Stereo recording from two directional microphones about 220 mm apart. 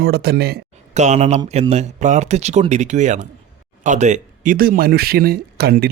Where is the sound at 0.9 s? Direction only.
30° right (ahead or behind).